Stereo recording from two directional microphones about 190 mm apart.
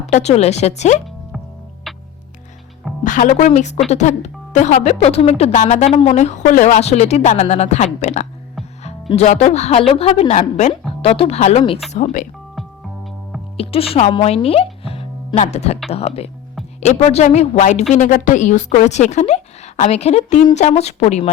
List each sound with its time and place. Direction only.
0.0 s a woman's voice: 35° left (ahead or behind)
1.9 s music: centre (ahead or behind)
3.0 s a woman's voice: 40° left (ahead or behind)
11.9 s a woman's voice: 40° left (ahead or behind)
13.6 s a woman's voice: 30° left (ahead or behind)